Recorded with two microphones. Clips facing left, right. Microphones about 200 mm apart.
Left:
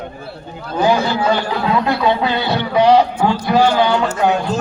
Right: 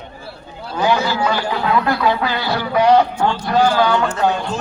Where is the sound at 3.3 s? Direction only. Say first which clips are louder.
Left 3 dB; 10° left (ahead or behind).